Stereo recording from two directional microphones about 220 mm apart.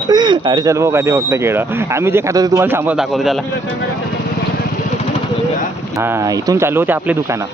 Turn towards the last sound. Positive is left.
turn(degrees=-10)  # may be behind; listen again after turning